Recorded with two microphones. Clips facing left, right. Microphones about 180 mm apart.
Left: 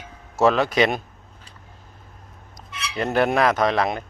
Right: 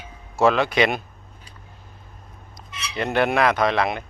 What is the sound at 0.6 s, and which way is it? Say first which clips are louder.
Speech: left 1 dB; 35° left (ahead or behind).